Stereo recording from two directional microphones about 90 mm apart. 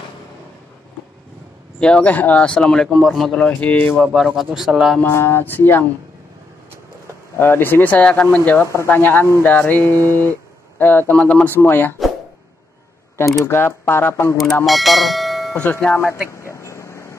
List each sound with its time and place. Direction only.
1.8 s speech: 10° left (ahead or behind)
3.3 s speech: 15° left (ahead or behind)
4.0 s speech: centre (ahead or behind)
5.0 s speech: 30° left (ahead or behind)
7.3 s speech: 25° left (ahead or behind)
13.2 s speech: 30° left (ahead or behind)
14.3 s speech: centre (ahead or behind)
15.5 s speech: 15° left (ahead or behind)
16.0 s vehicle: 30° left (ahead or behind)